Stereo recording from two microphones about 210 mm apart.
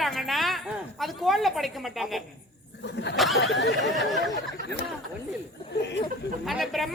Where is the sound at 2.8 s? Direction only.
55° left (ahead or behind).